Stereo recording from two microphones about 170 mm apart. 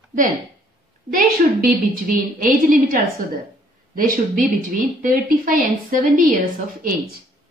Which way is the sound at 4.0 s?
55° right (ahead or behind).